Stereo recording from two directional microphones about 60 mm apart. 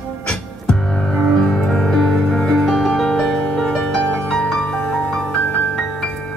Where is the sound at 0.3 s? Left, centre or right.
Centre.